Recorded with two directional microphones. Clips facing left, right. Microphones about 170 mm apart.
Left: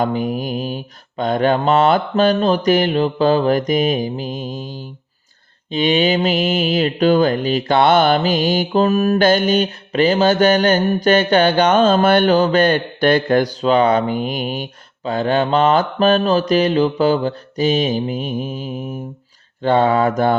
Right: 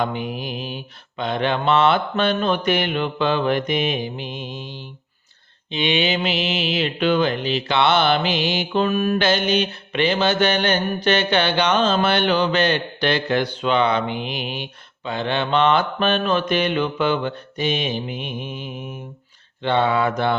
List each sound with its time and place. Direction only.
0.0 s mantra: 40° left (ahead or behind)